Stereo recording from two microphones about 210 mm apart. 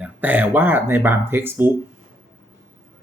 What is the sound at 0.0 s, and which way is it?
Speech, 10° right (ahead or behind).